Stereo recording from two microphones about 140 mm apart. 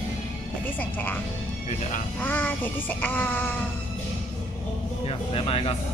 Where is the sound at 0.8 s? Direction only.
15° left (ahead or behind).